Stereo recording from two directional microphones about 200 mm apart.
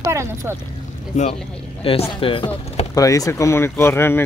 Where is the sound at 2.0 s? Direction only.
25° left (ahead or behind).